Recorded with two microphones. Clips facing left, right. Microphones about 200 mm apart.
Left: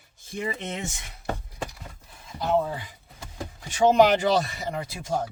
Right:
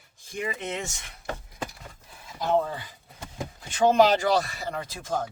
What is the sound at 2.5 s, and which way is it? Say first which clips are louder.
Speech: even; 10° left (ahead or behind).